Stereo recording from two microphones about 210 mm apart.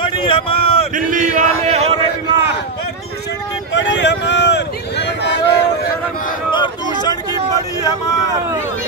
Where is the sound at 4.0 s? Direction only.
55° left (ahead or behind).